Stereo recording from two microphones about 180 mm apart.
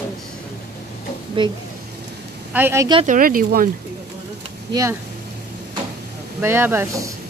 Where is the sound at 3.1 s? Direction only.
50° right (ahead or behind).